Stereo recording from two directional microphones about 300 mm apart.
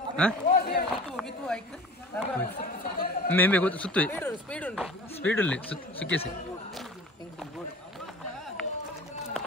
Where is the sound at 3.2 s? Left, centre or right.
Centre.